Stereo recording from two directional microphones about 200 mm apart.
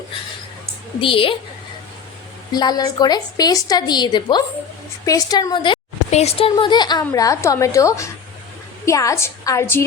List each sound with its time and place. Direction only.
1.0 s a woman's voice: 25° left (ahead or behind)
2.5 s a woman's voice: 20° left (ahead or behind)